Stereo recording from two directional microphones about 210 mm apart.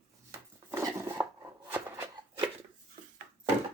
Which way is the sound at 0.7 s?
10° right (ahead or behind).